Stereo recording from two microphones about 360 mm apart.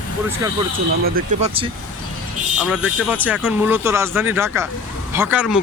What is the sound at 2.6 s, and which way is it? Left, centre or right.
Speech, centre.